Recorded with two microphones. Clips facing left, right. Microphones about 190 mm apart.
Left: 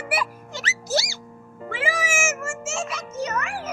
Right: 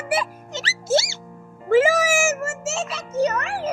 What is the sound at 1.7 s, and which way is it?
A child's voice, 40° right (ahead or behind).